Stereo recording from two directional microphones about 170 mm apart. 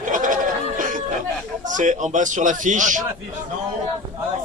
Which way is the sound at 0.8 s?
50° right (ahead or behind).